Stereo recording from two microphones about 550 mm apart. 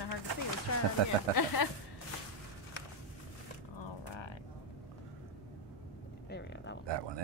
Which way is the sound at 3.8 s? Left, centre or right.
Left.